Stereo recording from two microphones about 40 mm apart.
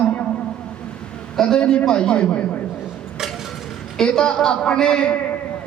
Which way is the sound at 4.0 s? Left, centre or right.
Left.